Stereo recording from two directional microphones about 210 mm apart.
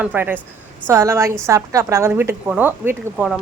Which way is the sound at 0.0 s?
10° right (ahead or behind).